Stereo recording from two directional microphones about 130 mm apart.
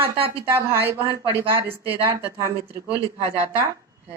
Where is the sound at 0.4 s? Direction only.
15° right (ahead or behind).